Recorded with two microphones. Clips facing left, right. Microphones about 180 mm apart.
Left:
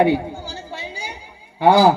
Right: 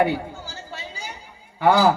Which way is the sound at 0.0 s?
15° left (ahead or behind).